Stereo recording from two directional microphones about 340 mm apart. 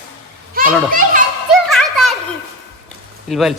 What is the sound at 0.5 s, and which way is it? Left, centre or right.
Speech, right.